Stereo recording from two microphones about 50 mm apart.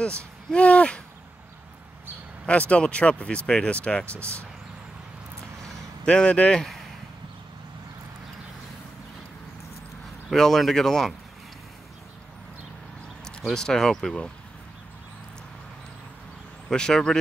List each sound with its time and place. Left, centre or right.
0.0 s speech: left
2.4 s speech: left
6.0 s speech: centre
10.3 s speech: centre
13.5 s speech: centre
16.6 s speech: centre